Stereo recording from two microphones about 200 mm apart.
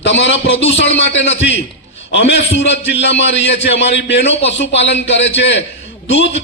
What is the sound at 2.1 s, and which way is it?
A man's voice, 60° left (ahead or behind).